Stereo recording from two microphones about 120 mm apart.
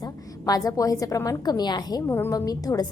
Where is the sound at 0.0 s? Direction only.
30° left (ahead or behind).